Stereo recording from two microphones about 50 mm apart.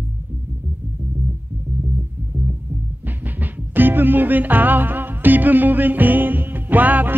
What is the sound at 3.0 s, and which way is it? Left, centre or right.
Music, right.